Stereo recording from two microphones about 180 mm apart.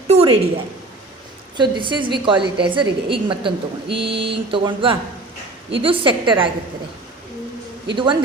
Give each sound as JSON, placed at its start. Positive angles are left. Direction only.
{"t": 0.1, "sound": "a sound", "side_deg": -35}
{"t": 1.5, "sound": "speech", "side_deg": -25}
{"t": 7.9, "sound": "speech", "side_deg": -25}